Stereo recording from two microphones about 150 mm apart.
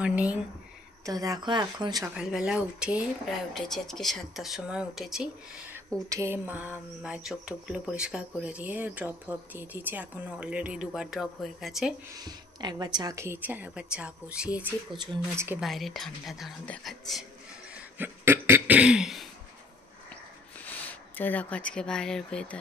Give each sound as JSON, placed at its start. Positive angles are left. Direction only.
{"t": 0.0, "sound": "speech", "side_deg": -10}
{"t": 1.0, "sound": "speech", "side_deg": -25}
{"t": 2.1, "sound": "speech", "side_deg": -5}
{"t": 6.0, "sound": "speech", "side_deg": -20}
{"t": 12.2, "sound": "speech", "side_deg": -25}
{"t": 15.6, "sound": "speech", "side_deg": 0}
{"t": 17.7, "sound": "throat clearing", "side_deg": -15}
{"t": 20.6, "sound": "speech", "side_deg": 10}